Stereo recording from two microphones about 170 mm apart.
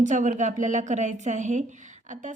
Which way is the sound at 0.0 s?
45° right (ahead or behind).